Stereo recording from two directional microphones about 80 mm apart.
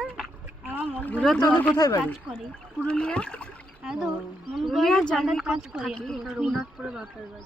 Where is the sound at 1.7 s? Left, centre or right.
Left.